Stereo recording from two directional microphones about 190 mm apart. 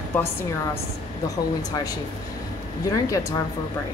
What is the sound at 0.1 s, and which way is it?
Speech, 10° left (ahead or behind).